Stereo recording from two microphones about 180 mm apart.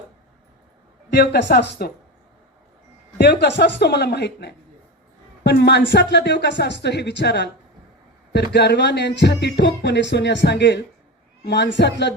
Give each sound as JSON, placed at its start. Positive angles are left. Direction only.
{"t": 1.1, "sound": "speech", "side_deg": 70}
{"t": 3.2, "sound": "speech", "side_deg": 70}